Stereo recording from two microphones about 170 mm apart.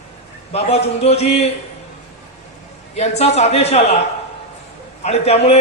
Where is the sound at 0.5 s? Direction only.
40° left (ahead or behind).